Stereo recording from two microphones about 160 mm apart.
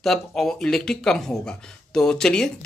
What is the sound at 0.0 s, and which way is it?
A man's voice, centre (ahead or behind).